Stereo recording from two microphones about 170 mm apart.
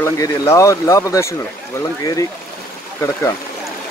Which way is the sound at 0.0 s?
15° left (ahead or behind).